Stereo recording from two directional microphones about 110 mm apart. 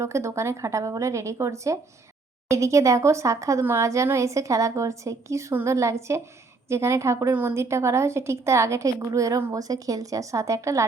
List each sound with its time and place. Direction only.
0.0 s speech: 25° right (ahead or behind)